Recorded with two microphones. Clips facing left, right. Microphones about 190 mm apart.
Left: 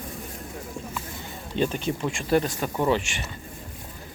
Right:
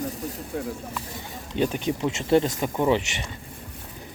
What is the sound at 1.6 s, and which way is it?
Speech, 15° right (ahead or behind).